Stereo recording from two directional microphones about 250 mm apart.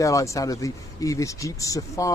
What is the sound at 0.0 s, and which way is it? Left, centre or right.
Speech, centre.